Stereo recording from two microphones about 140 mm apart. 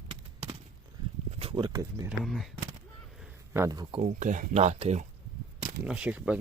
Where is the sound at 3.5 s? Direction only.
25° right (ahead or behind).